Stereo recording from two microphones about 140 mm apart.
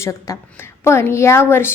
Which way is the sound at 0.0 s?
20° left (ahead or behind).